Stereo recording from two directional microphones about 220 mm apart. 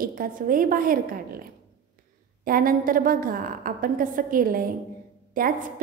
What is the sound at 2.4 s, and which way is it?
A woman's voice, 40° right (ahead or behind).